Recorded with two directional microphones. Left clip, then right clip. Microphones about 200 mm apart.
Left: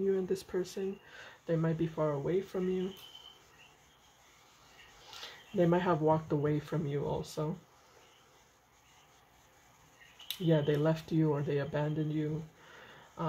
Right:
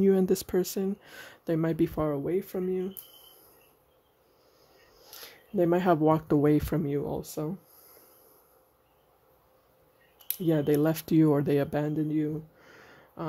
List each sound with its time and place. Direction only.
0.1 s speech: 60° right (ahead or behind)
5.1 s speech: 50° right (ahead or behind)
10.2 s speech: 55° right (ahead or behind)